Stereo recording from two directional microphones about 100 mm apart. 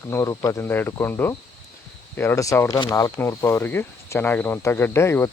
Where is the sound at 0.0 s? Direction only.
30° left (ahead or behind).